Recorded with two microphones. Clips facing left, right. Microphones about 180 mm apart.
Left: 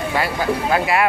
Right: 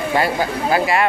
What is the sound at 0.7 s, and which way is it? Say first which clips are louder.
Speech: right 3 dB; centre (ahead or behind).